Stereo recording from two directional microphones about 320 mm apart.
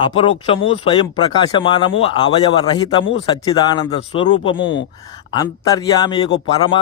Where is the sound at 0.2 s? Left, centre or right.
Centre.